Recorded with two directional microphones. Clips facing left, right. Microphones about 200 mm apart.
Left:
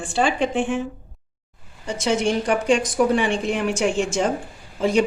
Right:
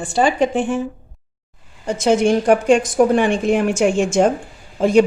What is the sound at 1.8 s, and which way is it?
A woman's voice, 50° right (ahead or behind).